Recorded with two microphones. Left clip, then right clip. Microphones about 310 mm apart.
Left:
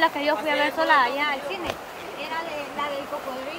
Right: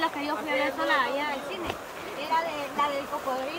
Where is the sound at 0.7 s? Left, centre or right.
Centre.